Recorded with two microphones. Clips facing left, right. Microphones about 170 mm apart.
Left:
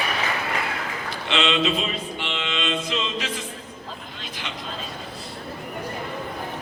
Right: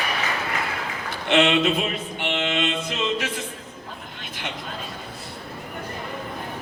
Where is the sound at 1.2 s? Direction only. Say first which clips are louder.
Right 4 dB; 55° right (ahead or behind).